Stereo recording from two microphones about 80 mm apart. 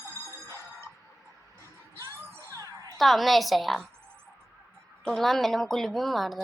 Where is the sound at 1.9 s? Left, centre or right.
Right.